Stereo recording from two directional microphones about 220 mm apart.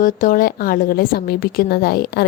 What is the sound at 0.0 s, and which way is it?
A woman's voice, 35° left (ahead or behind).